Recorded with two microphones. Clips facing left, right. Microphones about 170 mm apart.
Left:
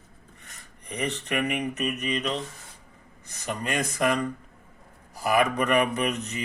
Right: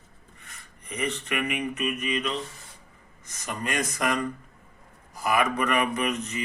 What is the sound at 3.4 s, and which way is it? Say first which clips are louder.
Speech: left 1 dB; 30° left (ahead or behind).